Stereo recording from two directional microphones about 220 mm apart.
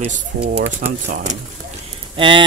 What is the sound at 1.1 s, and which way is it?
Speech, 35° right (ahead or behind).